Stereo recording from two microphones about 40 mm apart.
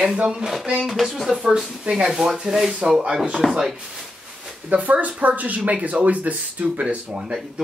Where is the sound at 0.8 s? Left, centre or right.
Centre.